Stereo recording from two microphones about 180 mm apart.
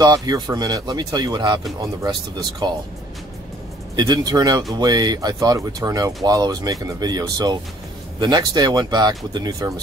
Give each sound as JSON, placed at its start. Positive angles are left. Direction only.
{"t": 0.0, "sound": "speech", "side_deg": -20}
{"t": 3.9, "sound": "speech", "side_deg": -25}